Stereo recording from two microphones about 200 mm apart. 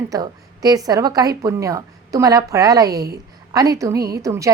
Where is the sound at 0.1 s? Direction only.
20° right (ahead or behind).